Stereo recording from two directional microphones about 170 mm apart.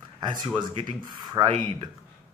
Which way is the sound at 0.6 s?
25° right (ahead or behind).